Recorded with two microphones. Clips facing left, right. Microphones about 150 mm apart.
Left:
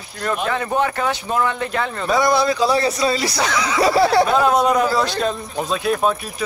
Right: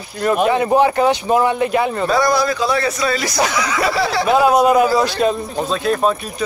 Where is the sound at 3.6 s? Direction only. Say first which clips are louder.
Left 1 dB; 30° left (ahead or behind).